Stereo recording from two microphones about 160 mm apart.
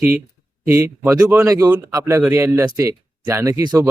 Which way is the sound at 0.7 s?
15° right (ahead or behind).